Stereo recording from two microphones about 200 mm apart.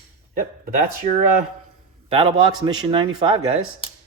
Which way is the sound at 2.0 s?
25° right (ahead or behind).